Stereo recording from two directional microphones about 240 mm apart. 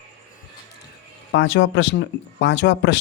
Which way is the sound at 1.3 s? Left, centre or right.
Left.